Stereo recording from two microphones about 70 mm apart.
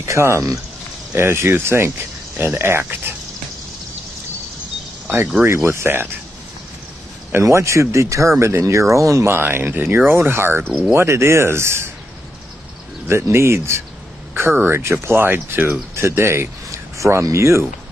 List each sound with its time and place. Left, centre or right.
0.0 s speech: right
5.7 s speech: right
7.4 s speech: right
13.1 s speech: right